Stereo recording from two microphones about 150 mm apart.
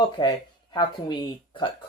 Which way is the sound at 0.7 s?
30° left (ahead or behind).